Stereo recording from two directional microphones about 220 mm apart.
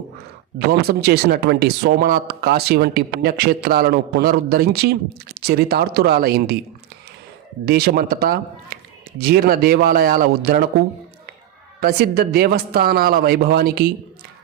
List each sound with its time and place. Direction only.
0.7 s speech: 45° right (ahead or behind)
7.6 s speech: 45° right (ahead or behind)
11.8 s speech: 45° right (ahead or behind)